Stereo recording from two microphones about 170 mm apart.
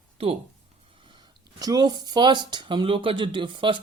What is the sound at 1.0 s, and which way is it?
Speech, 25° right (ahead or behind).